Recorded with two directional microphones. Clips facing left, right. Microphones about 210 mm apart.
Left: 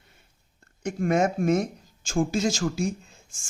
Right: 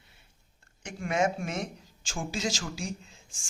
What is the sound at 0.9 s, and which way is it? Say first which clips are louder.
Speech: left 5 dB; 45° left (ahead or behind).